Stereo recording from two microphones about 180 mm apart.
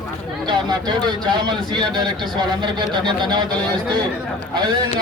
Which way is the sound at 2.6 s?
25° right (ahead or behind).